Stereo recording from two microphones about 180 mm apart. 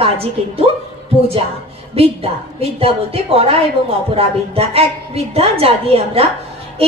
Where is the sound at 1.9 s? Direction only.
35° right (ahead or behind).